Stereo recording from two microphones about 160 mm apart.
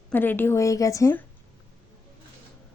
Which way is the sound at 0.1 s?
10° left (ahead or behind).